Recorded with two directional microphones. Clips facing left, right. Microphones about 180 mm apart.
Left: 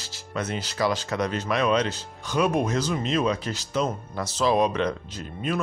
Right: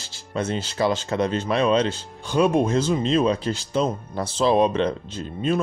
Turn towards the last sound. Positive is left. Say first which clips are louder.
# right 5 dB
turn(degrees=-25)  # may be behind; listen again after turning